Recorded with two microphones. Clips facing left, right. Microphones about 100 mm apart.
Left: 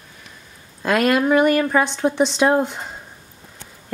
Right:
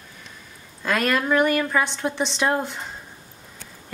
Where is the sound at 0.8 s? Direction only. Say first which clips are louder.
Left 5 dB; 15° left (ahead or behind).